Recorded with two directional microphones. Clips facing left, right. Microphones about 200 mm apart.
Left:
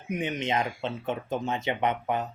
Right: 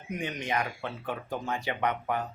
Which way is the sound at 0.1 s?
20° left (ahead or behind).